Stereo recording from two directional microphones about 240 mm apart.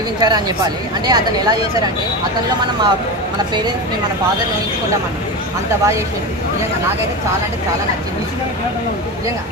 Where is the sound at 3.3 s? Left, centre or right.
Centre.